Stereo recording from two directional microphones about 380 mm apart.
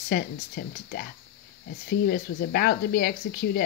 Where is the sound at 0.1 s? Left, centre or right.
Left.